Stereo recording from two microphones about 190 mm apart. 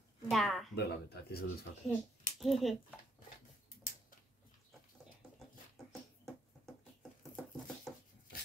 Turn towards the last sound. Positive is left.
turn(degrees=0)  # may be behind; listen again after turning